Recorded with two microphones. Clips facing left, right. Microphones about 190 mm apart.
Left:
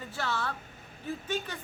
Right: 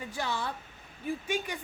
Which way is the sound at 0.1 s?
15° right (ahead or behind).